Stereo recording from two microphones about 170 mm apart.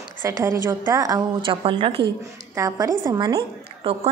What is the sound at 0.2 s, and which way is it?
A woman's voice, 20° right (ahead or behind).